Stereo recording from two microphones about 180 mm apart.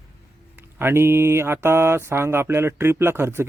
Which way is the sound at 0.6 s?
10° right (ahead or behind).